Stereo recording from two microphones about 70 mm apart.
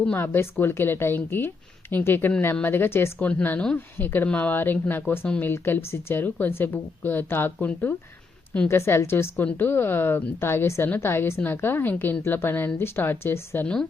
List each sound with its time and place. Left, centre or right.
0.6 s a woman's voice: left
3.2 s a woman's voice: left
8.6 s a woman's voice: left
9.3 s a woman's voice: left